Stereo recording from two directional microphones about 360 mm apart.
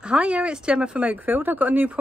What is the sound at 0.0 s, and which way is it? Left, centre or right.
Speech, centre.